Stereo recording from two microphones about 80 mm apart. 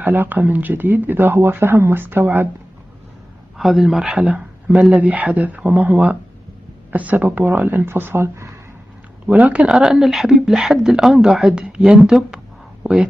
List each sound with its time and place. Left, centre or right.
0.0 s speech: right
3.5 s speech: centre; by 8.5 s right
9.3 s speech: centre